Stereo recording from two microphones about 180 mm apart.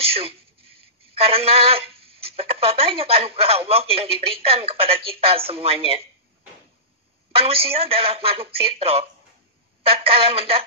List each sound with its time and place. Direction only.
0.0 s a sound: 30° right (ahead or behind)
1.1 s speech: 30° right (ahead or behind)
7.3 s speech: 30° right (ahead or behind)